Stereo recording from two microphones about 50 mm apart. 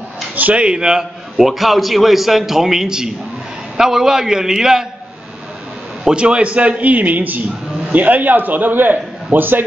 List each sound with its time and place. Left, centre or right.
0.4 s a man's voice: right
1.4 s a man's voice: centre
6.0 s a man's voice: right